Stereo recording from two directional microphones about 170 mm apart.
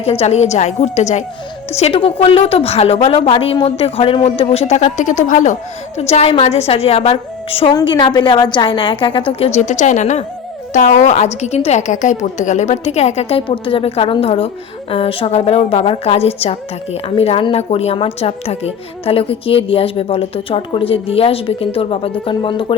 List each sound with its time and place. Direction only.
0.0 s a woman's voice: 40° left (ahead or behind)